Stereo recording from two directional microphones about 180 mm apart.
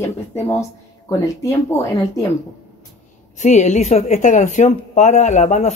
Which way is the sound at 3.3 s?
40° left (ahead or behind).